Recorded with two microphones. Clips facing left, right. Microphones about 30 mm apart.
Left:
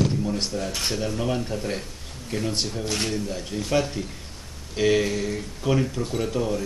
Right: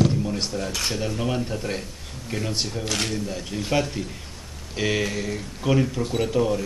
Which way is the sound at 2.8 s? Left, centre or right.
Right.